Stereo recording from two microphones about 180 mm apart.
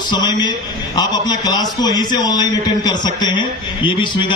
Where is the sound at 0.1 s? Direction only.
25° left (ahead or behind).